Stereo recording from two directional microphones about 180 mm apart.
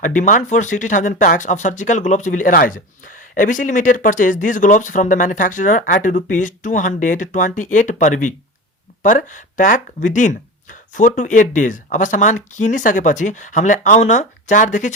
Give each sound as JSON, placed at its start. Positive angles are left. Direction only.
{"t": 0.0, "sound": "speech", "side_deg": 45}